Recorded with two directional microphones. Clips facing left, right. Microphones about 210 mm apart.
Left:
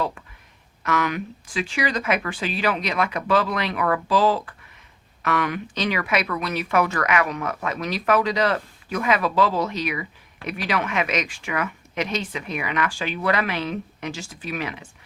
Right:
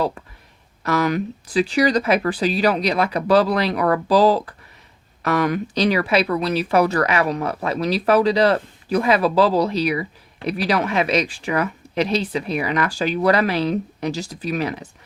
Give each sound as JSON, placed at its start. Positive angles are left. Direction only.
{"t": 0.8, "sound": "speech", "side_deg": -35}